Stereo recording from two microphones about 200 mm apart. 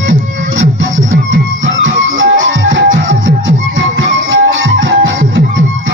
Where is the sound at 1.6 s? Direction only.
75° right (ahead or behind).